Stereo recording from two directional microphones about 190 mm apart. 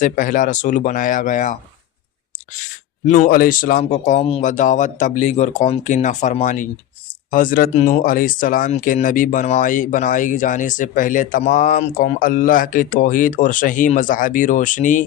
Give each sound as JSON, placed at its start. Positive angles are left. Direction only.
{"t": 0.0, "sound": "speech", "side_deg": 45}
{"t": 3.1, "sound": "a man's voice", "side_deg": 50}